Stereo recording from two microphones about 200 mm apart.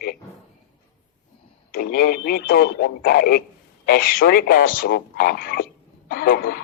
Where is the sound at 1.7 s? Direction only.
50° left (ahead or behind).